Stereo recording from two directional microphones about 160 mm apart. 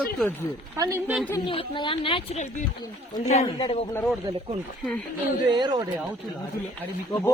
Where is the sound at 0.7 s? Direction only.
15° right (ahead or behind).